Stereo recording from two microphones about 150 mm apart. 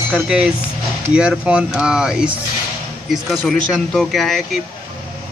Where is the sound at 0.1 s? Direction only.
5° right (ahead or behind).